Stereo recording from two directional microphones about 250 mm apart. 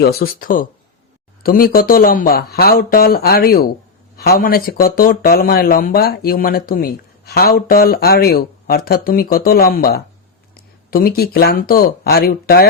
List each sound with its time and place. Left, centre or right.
0.0 s speech: left